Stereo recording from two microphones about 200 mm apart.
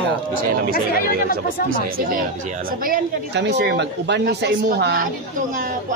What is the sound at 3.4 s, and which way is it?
Speech, 60° right (ahead or behind).